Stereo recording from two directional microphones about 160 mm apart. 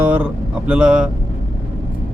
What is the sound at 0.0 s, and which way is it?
Speech, 10° right (ahead or behind).